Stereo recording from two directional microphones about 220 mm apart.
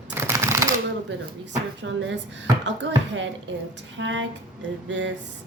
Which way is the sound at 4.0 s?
55° right (ahead or behind).